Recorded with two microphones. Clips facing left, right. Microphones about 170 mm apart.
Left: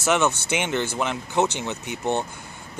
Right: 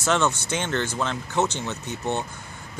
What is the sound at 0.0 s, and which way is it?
Speech, 10° left (ahead or behind).